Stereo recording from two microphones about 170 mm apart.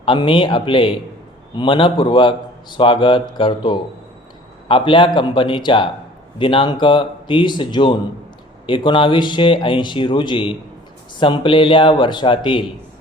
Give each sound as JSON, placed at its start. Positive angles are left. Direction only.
{"t": 0.0, "sound": "a man's voice", "side_deg": 30}